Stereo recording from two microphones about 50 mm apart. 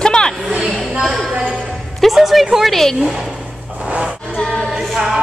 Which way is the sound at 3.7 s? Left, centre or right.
Right.